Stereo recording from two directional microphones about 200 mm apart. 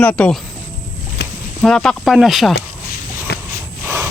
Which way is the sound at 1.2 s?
55° left (ahead or behind).